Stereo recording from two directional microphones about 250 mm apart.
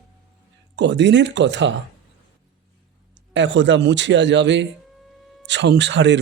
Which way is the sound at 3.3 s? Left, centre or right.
Right.